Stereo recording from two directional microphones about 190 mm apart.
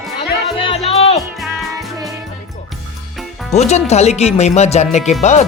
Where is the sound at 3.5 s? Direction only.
35° left (ahead or behind).